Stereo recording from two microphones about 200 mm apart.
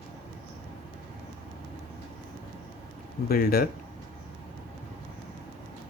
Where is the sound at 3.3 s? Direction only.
50° left (ahead or behind).